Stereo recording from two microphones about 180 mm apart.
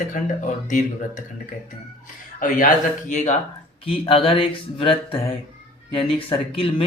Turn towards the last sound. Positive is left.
turn(degrees=30)  # may be behind; listen again after turning